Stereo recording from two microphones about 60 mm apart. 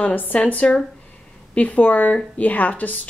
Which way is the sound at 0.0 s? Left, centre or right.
Left.